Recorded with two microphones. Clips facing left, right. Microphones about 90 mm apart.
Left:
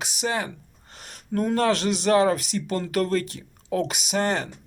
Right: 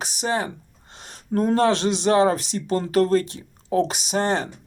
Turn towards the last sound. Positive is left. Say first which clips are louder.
# right 2 dB
turn(degrees=-30)  # may be behind; listen again after turning